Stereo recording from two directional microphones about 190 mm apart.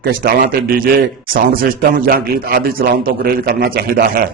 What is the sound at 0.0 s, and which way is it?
A man's voice, 50° right (ahead or behind).